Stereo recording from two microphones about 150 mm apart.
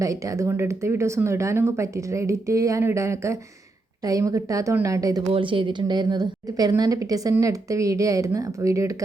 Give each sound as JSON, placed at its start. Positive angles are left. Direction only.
{"t": 0.0, "sound": "a woman's voice", "side_deg": -20}
{"t": 5.3, "sound": "a woman's voice", "side_deg": -35}